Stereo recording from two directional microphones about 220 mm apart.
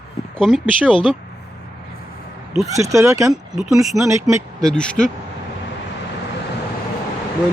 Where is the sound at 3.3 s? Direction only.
Centre (ahead or behind).